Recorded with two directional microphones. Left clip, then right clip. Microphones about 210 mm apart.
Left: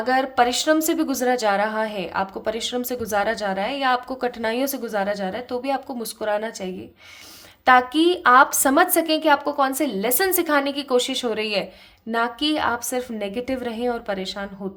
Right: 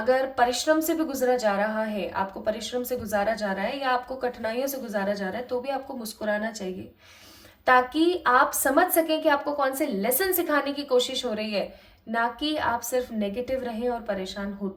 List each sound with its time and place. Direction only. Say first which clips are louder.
0.0 s a woman's voice: left 3 dB; 50° left (ahead or behind)
7.6 s a woman's voice: left 4 dB; 50° left (ahead or behind)